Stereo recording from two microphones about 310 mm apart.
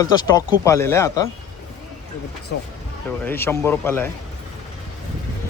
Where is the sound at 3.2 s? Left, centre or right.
Centre.